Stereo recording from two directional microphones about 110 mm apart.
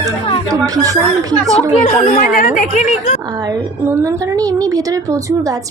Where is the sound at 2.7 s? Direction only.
90° left.